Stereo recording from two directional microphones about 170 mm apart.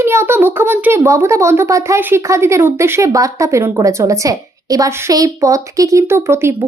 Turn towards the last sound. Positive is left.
turn(degrees=-15)  # may be behind; listen again after turning